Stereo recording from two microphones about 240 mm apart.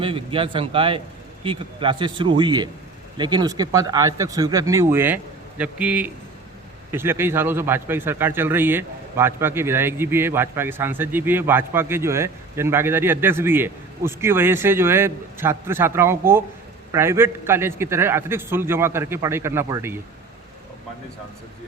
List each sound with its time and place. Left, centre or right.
0.0 s a man's voice: right